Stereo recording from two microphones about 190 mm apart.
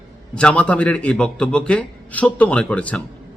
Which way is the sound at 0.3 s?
5° left (ahead or behind).